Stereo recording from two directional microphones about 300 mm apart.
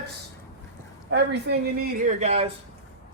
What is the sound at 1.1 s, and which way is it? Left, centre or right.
Speech, right.